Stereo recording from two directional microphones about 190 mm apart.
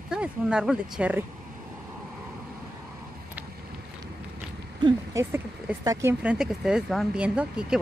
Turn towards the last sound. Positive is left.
turn(degrees=-5)  # may be behind; listen again after turning